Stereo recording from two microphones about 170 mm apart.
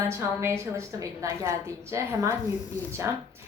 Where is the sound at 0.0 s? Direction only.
15° right (ahead or behind).